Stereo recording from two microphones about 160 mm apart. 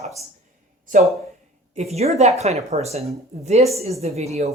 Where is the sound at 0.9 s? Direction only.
50° right (ahead or behind).